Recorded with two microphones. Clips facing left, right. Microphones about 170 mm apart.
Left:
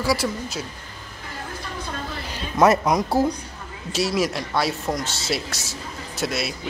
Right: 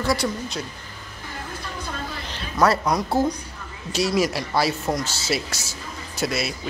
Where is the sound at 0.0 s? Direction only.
5° left (ahead or behind).